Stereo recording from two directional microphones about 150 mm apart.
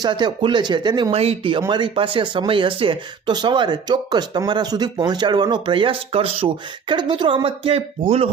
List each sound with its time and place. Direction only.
0.0 s speech: 30° right (ahead or behind)
1.1 s speech: 40° right (ahead or behind)